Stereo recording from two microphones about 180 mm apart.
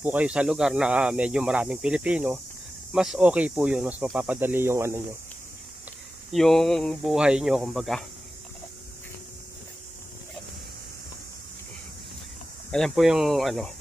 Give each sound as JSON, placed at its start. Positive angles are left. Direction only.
{"t": 0.0, "sound": "speech", "side_deg": -10}
{"t": 6.3, "sound": "speech", "side_deg": 0}
{"t": 12.7, "sound": "speech", "side_deg": 0}